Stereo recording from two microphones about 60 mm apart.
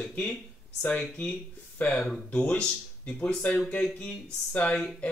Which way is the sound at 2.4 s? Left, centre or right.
Centre.